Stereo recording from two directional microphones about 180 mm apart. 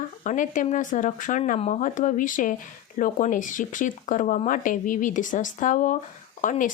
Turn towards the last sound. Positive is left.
turn(degrees=45)  # may be behind; listen again after turning